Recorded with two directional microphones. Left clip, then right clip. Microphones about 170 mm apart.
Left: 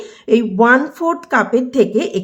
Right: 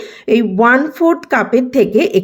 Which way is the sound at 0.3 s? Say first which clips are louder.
Right 1 dB; 20° right (ahead or behind).